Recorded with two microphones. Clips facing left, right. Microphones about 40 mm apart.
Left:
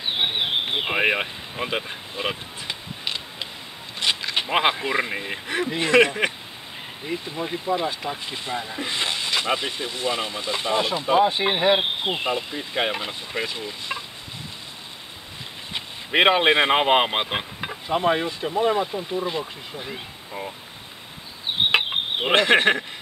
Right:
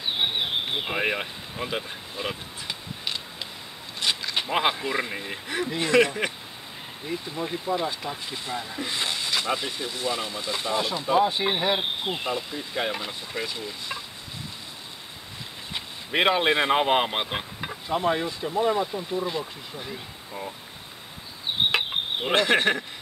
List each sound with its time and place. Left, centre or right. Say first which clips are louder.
0.0 s a sound: left 2 dB; left
4.0 s speech: left 3 dB; left
15.7 s speech: left 4 dB; left
21.7 s insect: left 4 dB; left